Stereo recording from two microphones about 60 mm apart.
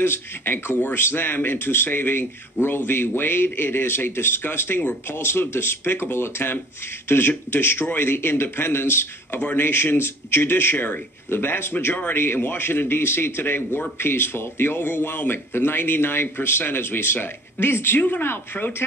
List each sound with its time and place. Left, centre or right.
0.0 s a man's voice: left
9.4 s speech: left
9.7 s a man's voice: left